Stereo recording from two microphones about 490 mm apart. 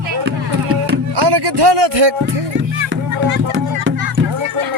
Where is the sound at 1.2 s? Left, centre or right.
Right.